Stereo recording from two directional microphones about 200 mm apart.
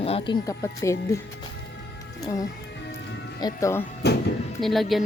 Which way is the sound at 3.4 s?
15° left (ahead or behind).